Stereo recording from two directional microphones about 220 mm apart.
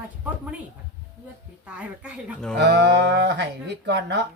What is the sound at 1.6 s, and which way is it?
Speech, 5° right (ahead or behind).